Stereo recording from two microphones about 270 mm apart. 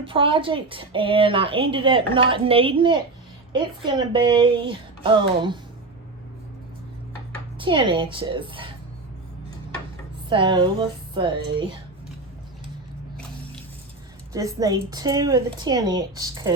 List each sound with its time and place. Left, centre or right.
0.0 s a woman's voice: centre
7.6 s speech: centre
10.2 s speech: centre
14.3 s a woman's voice: centre